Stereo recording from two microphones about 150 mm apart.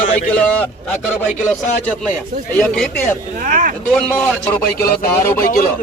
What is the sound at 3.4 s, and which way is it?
Speech, 65° right (ahead or behind).